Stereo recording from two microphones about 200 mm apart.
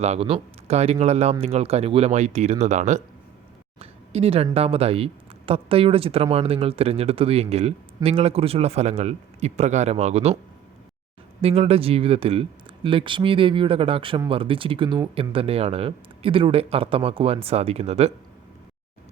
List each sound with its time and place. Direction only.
0.0 s speech: 30° right (ahead or behind)
3.8 s a sound: 30° right (ahead or behind)
4.5 s speech: 30° right (ahead or behind)
11.3 s speech: 30° right (ahead or behind)